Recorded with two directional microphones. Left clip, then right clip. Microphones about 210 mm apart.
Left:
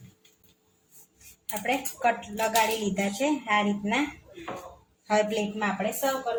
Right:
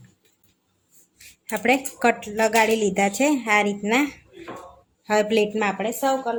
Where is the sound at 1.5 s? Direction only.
55° right (ahead or behind).